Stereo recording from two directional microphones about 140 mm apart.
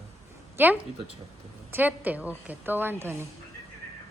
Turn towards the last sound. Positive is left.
turn(degrees=-15)  # may be behind; listen again after turning